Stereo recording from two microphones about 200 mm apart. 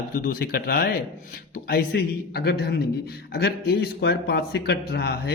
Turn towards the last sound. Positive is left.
turn(degrees=55)  # may be behind; listen again after turning